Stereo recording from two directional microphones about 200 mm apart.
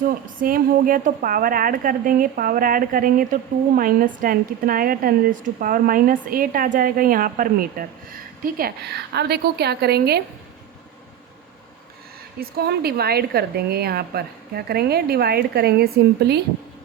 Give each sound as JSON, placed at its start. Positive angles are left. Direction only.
{"t": 0.0, "sound": "a woman's voice", "side_deg": -45}
{"t": 12.4, "sound": "a woman's voice", "side_deg": -50}